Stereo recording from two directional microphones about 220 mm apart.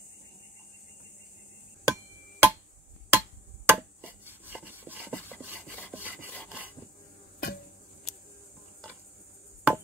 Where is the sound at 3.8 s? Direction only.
10° right (ahead or behind).